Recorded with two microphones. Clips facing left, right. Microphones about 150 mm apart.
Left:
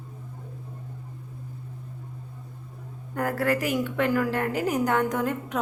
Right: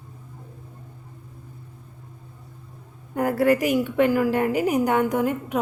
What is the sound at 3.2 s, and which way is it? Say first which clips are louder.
Speech: right 6 dB; 15° right (ahead or behind).